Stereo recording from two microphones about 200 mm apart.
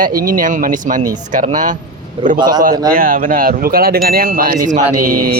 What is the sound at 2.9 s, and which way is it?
Speech, 45° right (ahead or behind).